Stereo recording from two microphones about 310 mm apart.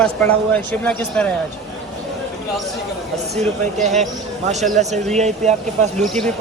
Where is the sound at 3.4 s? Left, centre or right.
Right.